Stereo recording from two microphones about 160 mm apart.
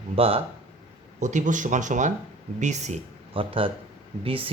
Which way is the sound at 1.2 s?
50° right (ahead or behind).